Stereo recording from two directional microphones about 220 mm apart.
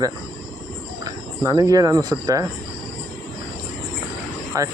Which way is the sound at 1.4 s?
15° right (ahead or behind).